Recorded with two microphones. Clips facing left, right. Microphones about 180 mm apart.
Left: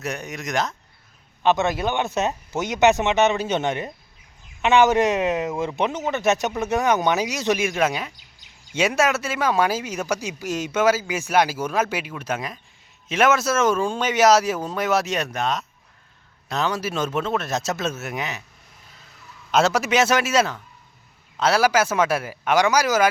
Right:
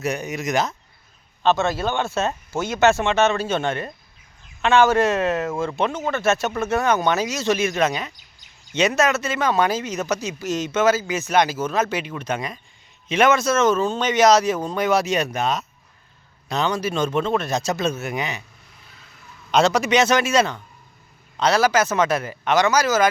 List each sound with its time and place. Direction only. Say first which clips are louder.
0.0 s speech: right 5 dB; centre (ahead or behind)
1.4 s speech: even; 15° left (ahead or behind)
19.5 s speech: right 2 dB; 5° left (ahead or behind)